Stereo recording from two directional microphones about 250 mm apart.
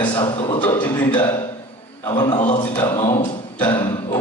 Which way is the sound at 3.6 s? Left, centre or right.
Centre.